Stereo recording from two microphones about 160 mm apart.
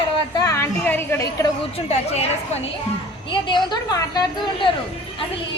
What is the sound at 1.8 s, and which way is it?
Speech, 40° left (ahead or behind).